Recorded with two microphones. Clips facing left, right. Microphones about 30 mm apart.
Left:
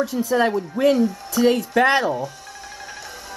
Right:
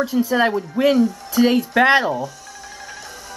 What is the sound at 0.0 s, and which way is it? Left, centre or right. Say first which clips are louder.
Speech: right 2 dB; right.